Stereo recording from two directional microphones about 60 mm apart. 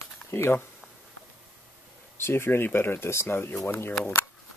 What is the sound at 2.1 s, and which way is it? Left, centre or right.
Speech, left.